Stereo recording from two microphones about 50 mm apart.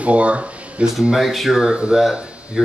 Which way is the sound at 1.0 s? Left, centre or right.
Centre.